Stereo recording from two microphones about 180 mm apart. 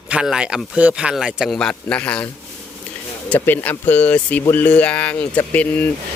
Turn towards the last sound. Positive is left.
turn(degrees=10)  # may be behind; listen again after turning